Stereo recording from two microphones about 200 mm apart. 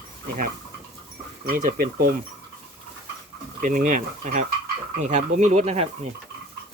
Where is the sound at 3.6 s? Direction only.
40° right (ahead or behind).